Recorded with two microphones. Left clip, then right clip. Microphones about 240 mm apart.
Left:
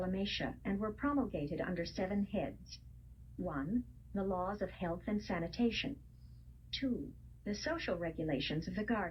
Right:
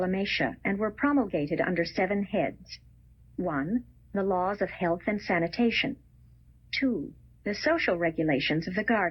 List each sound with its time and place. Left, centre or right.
0.0 s speech: right